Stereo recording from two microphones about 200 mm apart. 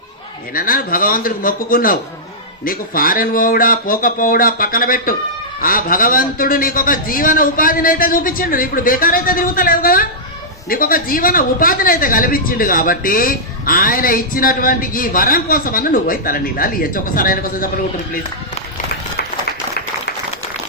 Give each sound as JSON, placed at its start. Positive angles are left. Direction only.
{"t": 0.5, "sound": "a woman's voice", "side_deg": 45}